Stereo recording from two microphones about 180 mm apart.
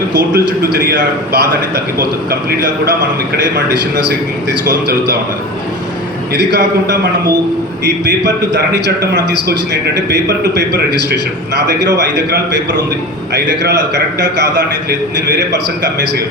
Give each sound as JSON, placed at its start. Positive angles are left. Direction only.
{"t": 0.3, "sound": "a man's voice", "side_deg": -60}
{"t": 2.5, "sound": "a man's voice", "side_deg": -60}
{"t": 6.3, "sound": "a man's voice", "side_deg": -70}